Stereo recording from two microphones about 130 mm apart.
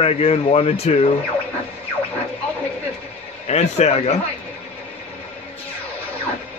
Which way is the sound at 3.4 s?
60° left (ahead or behind).